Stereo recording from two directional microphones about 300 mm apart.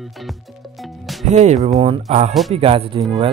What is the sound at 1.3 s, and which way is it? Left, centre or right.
Speech, right.